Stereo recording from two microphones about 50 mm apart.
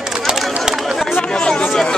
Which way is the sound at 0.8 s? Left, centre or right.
Centre.